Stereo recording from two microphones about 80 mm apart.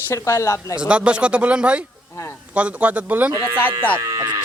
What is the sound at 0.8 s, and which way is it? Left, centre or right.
Speech, centre.